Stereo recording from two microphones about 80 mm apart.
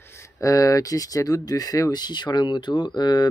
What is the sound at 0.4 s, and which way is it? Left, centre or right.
Speech, left.